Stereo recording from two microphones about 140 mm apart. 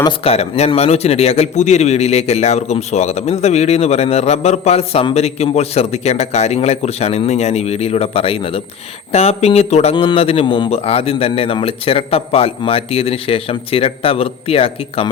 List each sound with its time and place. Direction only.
0.3 s a man's voice: 50° left (ahead or behind)
9.9 s a man's voice: 35° left (ahead or behind)